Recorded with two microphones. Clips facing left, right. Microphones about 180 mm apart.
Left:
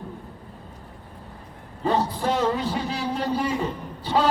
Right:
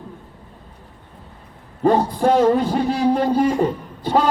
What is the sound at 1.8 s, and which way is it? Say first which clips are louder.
A man's voice: right 7 dB; 50° right (ahead or behind).